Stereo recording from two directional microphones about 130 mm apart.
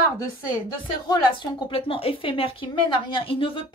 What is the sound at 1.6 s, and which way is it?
Speech, 45° left (ahead or behind).